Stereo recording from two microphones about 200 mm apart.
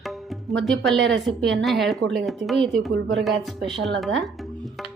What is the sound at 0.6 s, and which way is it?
A woman's voice, centre (ahead or behind).